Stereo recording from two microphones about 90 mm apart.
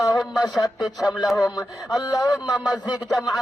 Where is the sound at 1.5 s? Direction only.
45° left (ahead or behind).